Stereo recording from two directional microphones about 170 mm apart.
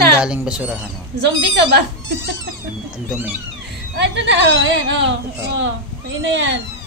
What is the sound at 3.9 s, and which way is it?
Speech, 90° right.